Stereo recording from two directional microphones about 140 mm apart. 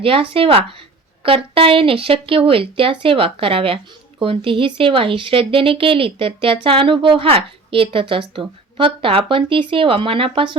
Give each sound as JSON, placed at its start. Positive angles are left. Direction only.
{"t": 0.0, "sound": "speech", "side_deg": -40}